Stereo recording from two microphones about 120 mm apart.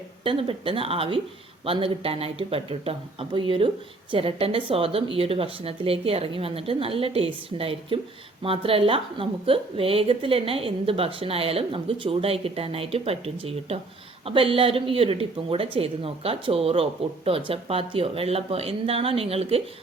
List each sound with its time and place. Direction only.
0.3 s a woman's voice: 45° right (ahead or behind)